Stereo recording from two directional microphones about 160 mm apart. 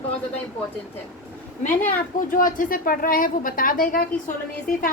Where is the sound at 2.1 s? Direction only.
55° left (ahead or behind).